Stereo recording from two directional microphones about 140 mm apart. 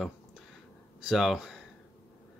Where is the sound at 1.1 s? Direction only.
5° right (ahead or behind).